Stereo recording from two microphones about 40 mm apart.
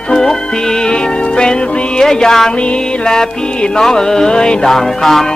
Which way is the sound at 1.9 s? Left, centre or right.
Centre.